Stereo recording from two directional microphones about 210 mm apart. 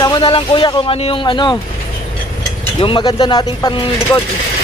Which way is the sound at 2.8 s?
20° left (ahead or behind).